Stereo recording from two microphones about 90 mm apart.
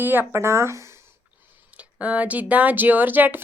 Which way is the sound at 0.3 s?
30° right (ahead or behind).